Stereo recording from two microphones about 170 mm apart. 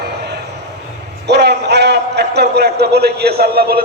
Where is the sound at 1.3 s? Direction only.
80° right.